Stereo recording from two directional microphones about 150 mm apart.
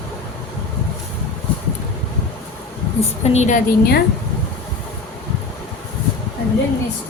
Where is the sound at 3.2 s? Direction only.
50° left (ahead or behind).